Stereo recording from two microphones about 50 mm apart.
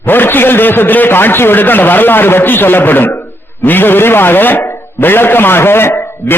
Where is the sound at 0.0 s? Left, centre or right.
Left.